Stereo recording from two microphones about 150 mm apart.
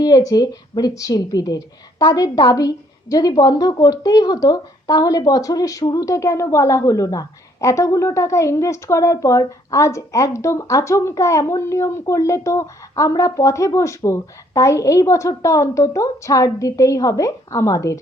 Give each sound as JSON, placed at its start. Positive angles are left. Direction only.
{"t": 0.0, "sound": "speech", "side_deg": 25}